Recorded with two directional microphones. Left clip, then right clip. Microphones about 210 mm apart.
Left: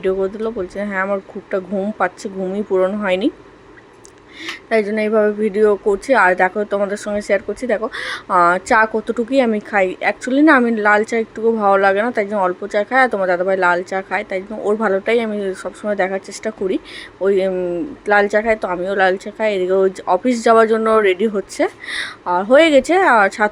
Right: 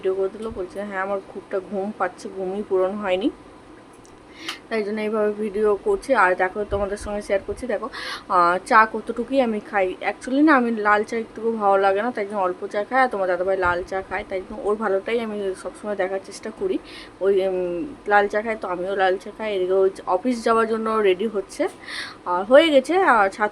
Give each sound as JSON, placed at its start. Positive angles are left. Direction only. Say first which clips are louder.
{"t": 0.0, "sound": "a woman's voice", "louder": "left 5 dB", "side_deg": 20}
{"t": 4.7, "sound": "a woman's voice", "louder": "left 9 dB", "side_deg": 20}